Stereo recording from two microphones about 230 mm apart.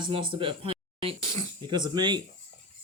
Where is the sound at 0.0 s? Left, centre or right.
Right.